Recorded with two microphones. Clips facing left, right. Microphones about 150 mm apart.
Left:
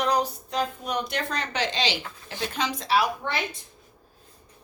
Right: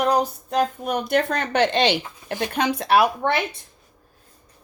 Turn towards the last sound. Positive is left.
turn(degrees=-60)  # may be behind; listen again after turning